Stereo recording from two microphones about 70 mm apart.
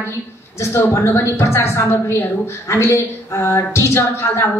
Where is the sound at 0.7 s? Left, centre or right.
Left.